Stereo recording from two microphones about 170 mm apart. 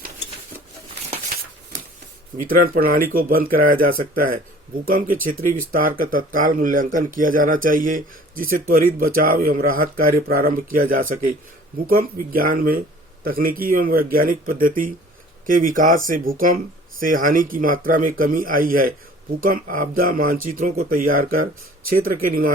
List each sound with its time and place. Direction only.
2.4 s speech: 55° right (ahead or behind)